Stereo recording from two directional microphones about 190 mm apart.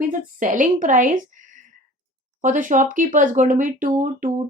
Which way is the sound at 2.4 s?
45° right (ahead or behind).